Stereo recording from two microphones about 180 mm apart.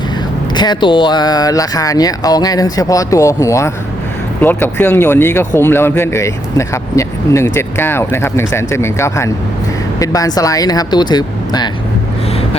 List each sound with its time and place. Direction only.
0.5 s speech: 25° left (ahead or behind)